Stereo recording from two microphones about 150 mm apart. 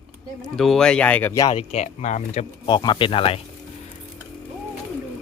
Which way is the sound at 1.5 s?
45° left (ahead or behind).